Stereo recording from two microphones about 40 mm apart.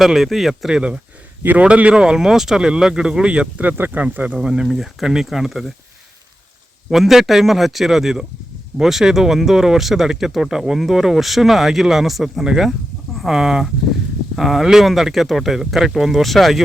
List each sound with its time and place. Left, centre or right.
0.0 s speech: centre
0.7 s speech: right
3.8 s speech: right
4.1 s speech: right
4.4 s speech: centre
6.9 s speech: centre